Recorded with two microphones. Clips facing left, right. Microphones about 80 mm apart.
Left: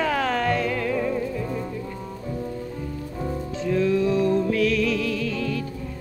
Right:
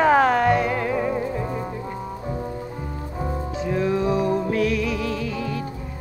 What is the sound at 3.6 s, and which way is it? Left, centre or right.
Music, right.